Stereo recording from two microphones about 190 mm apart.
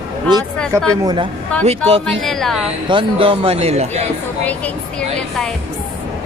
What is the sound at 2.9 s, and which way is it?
Speech, 25° right (ahead or behind).